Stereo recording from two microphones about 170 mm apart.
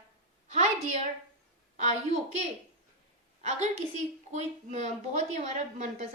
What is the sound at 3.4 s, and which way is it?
A woman's voice, 45° right (ahead or behind).